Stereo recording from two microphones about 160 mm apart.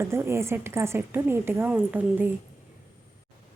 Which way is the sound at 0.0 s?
15° right (ahead or behind).